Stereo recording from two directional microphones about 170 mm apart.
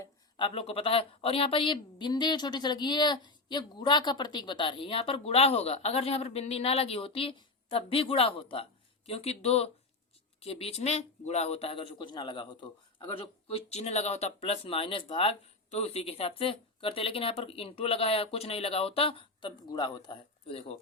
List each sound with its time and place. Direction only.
0.0 s a man's voice: 30° left (ahead or behind)